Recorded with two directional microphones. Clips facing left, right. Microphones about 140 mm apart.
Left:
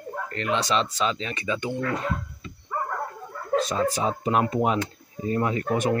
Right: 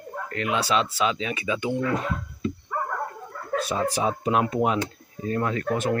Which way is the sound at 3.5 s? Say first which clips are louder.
Left 2 dB; 10° right (ahead or behind).